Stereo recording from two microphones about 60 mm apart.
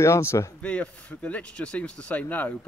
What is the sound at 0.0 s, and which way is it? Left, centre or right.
Speech, left.